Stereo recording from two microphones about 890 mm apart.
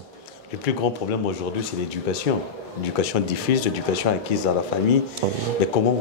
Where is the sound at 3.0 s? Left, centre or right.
Left.